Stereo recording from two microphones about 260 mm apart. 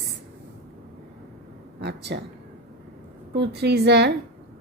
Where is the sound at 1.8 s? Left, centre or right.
Right.